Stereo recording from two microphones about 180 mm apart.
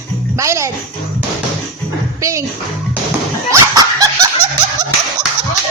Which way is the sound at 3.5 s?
20° right (ahead or behind).